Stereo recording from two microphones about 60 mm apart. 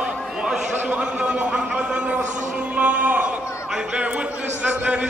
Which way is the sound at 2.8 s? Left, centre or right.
Right.